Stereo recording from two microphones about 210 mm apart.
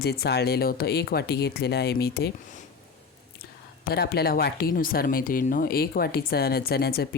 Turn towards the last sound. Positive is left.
turn(degrees=50)  # may be behind; listen again after turning